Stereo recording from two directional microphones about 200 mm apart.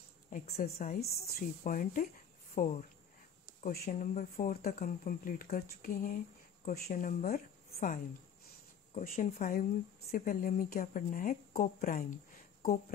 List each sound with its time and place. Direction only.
0.3 s speech: 45° left (ahead or behind)